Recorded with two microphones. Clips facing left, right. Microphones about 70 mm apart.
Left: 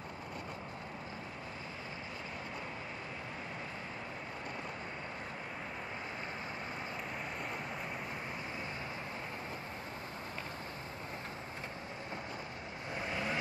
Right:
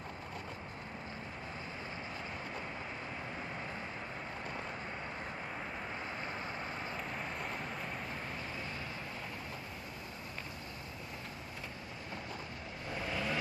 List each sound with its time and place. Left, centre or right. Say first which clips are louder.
12.9 s vehicle: even; left